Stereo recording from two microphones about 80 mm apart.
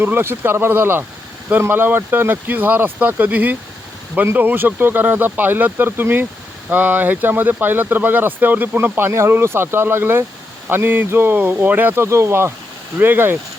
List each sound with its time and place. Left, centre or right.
0.0 s speech: right